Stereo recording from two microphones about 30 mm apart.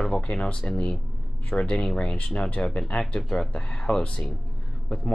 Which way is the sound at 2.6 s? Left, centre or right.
Left.